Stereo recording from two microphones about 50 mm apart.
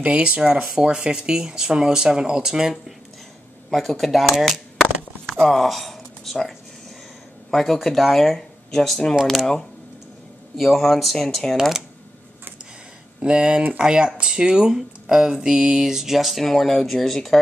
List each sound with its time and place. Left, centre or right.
0.0 s speech: right
3.7 s speech: centre
5.3 s a sound: centre
7.5 s speech: centre
10.6 s speech: centre
13.2 s speech: right; by 17.4 s centre